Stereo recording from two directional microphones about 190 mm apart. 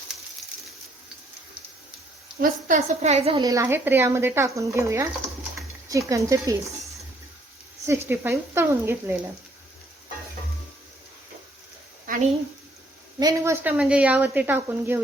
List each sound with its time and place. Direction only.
2.4 s a woman's voice: 45° right (ahead or behind)
3.4 s a woman's voice: 15° right (ahead or behind)
7.9 s a woman's voice: 10° right (ahead or behind)
13.1 s a woman's voice: 15° right (ahead or behind)